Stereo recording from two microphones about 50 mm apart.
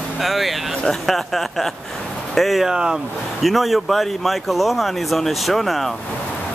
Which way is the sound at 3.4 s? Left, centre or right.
Centre.